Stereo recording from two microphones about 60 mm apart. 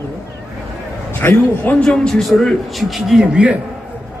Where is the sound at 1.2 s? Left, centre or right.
Left.